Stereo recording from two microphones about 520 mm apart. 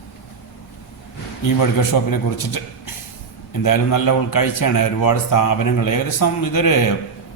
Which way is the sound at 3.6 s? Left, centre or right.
Left.